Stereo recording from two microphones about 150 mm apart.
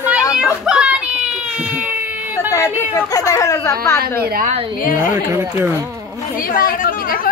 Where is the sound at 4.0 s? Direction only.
90° right.